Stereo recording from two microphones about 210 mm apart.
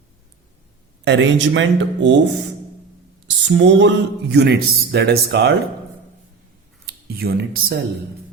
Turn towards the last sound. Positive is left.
turn(degrees=-45)  # may be behind; listen again after turning